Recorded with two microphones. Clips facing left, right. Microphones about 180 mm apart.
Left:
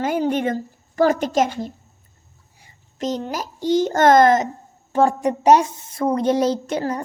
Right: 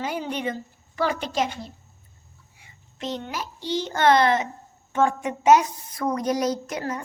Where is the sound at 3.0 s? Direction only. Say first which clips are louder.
Left 6 dB; 40° left (ahead or behind).